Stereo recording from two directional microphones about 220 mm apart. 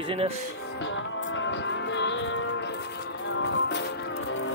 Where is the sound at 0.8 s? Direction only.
55° left (ahead or behind).